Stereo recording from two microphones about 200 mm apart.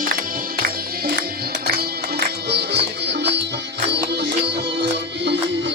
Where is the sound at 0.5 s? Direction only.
50° right (ahead or behind).